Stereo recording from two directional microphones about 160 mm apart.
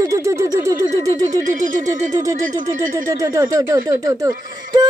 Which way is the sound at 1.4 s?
55° right (ahead or behind).